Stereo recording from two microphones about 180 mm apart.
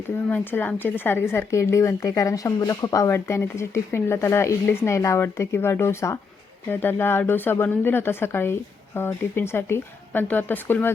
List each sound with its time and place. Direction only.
0.3 s speech: 10° left (ahead or behind)